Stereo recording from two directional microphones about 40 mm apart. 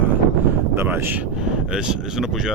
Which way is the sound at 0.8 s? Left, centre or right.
Right.